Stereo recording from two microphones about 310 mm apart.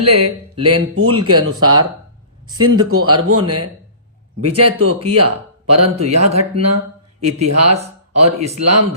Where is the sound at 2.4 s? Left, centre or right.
Centre.